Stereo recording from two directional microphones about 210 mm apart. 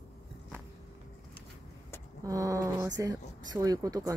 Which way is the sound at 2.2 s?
15° right (ahead or behind).